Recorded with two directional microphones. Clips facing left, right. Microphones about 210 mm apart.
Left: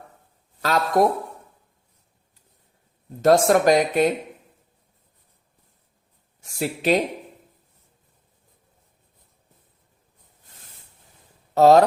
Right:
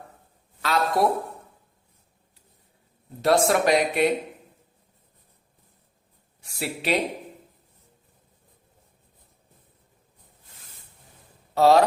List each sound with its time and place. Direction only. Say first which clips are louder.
0.6 s speech: left 4 dB; 45° left (ahead or behind)
3.2 s speech: left 4 dB; 45° left (ahead or behind)
6.4 s speech: left 6 dB; 45° left (ahead or behind)
11.5 s speech: left 4 dB; 45° left (ahead or behind)